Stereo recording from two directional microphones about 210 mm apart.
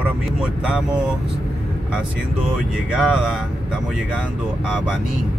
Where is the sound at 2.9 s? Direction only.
5° right (ahead or behind).